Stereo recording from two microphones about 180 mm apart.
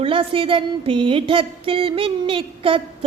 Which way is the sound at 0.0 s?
30° right (ahead or behind).